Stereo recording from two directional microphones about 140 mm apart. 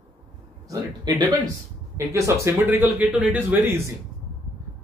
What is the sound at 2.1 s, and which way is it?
Speech, 15° right (ahead or behind).